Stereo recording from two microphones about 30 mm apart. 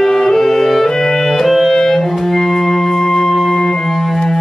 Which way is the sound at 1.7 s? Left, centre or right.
Centre.